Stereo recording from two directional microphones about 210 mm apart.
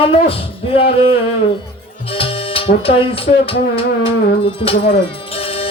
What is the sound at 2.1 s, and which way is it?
Music, 25° left (ahead or behind).